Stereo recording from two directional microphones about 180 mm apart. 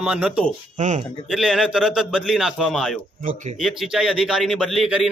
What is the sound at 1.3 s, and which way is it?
A man's voice, centre (ahead or behind).